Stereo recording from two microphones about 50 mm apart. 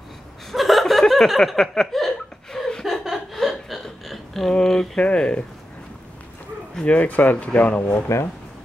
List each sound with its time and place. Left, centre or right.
0.5 s a sound: centre
4.6 s speech: centre
6.9 s speech: left